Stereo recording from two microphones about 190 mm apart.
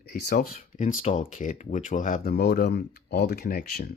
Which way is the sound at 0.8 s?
40° left (ahead or behind).